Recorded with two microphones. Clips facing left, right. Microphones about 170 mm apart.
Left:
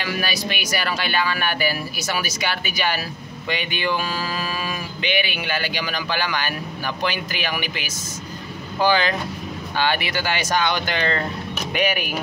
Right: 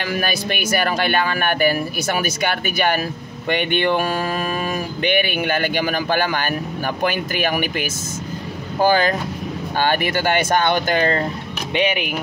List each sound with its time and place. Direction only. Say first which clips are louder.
0.0 s speech: right 3 dB; 50° right (ahead or behind)
11.7 s speech: right 3 dB; 25° right (ahead or behind)